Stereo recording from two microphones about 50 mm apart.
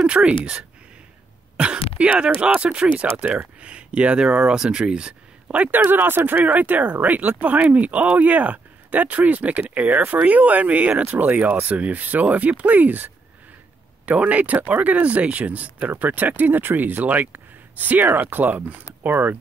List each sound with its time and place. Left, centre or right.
0.0 s speech: centre
5.7 s speech: right
15.9 s speech: right